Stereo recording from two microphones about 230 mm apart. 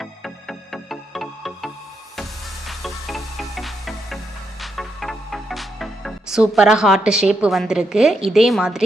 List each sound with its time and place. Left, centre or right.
0.0 s music: centre